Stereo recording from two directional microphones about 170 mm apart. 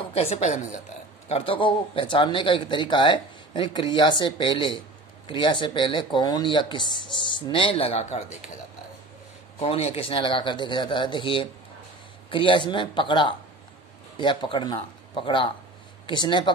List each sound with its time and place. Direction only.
0.1 s a woman's voice: 35° left (ahead or behind)
1.3 s speech: 30° left (ahead or behind)
9.6 s speech: 35° left (ahead or behind)